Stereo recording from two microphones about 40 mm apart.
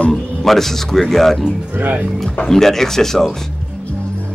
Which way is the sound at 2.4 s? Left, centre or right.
Centre.